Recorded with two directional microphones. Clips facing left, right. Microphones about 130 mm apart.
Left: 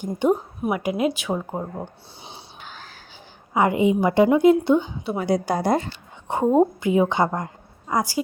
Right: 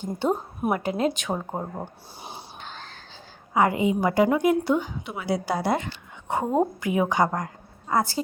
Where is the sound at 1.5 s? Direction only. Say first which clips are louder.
Left 2 dB; 10° right (ahead or behind).